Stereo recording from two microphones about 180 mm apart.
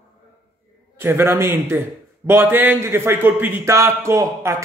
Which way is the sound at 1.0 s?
10° right (ahead or behind).